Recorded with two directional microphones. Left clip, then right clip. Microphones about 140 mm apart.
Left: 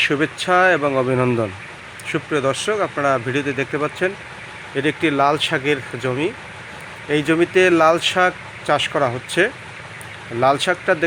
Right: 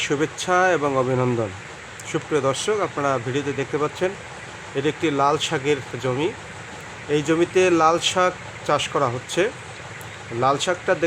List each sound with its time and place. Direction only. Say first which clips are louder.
0.0 s speech: left 5 dB; 10° left (ahead or behind)
1.1 s speech: left 3 dB; 25° left (ahead or behind)
2.0 s speech: left 2 dB; 10° left (ahead or behind)